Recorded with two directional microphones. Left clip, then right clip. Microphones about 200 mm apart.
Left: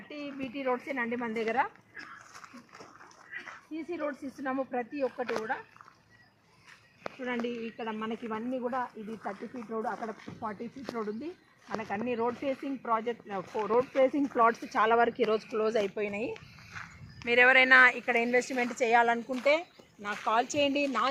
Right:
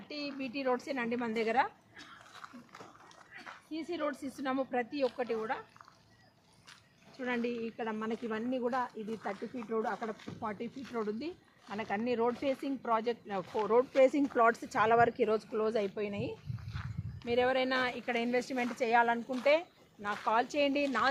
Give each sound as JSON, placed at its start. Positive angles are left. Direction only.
{"t": 0.3, "sound": "speech", "side_deg": 15}
{"t": 1.3, "sound": "speech", "side_deg": -5}
{"t": 3.3, "sound": "dog", "side_deg": -70}
{"t": 3.7, "sound": "speech", "side_deg": -20}
{"t": 4.0, "sound": "speech", "side_deg": -5}
{"t": 7.8, "sound": "speech", "side_deg": 25}
{"t": 14.3, "sound": "speech", "side_deg": 35}
{"t": 17.2, "sound": "speech", "side_deg": 10}